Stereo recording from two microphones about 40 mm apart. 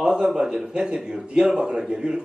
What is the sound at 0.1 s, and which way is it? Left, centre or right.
A man's voice, centre.